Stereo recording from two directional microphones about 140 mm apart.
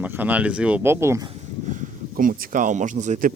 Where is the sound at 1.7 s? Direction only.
80° right; by 3.3 s 65° right (ahead or behind).